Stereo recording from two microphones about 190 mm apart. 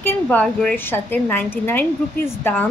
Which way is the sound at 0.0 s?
10° left (ahead or behind).